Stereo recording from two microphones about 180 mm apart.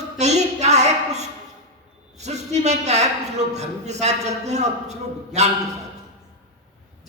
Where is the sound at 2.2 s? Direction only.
40° right (ahead or behind).